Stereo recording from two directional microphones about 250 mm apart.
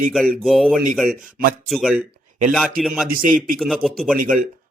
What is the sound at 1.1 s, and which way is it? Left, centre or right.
Speech, right.